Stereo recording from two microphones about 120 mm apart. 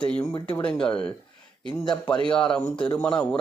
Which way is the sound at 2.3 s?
10° left (ahead or behind).